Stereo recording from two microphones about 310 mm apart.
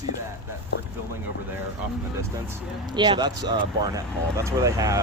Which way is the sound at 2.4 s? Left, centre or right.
Centre.